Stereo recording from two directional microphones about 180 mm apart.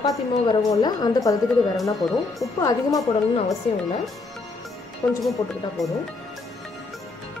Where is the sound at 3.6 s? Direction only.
30° left (ahead or behind).